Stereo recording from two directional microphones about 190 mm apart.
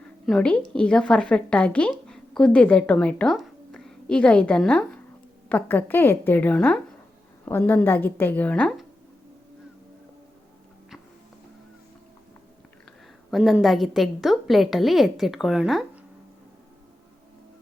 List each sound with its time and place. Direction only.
0.3 s a woman's voice: 5° left (ahead or behind)
13.3 s a woman's voice: centre (ahead or behind)